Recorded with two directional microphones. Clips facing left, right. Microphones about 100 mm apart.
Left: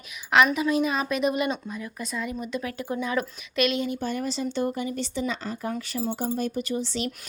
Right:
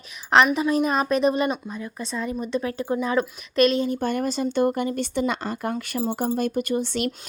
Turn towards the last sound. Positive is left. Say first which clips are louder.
# right 4 dB
turn(degrees=-55)  # may be behind; listen again after turning